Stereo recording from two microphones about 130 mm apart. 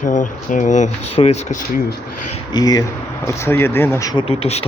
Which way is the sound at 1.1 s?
55° left (ahead or behind).